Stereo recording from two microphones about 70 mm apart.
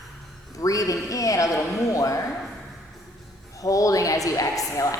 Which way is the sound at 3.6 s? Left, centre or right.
Left.